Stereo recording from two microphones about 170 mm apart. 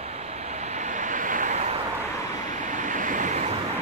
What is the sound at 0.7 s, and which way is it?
Vehicle, 45° right (ahead or behind).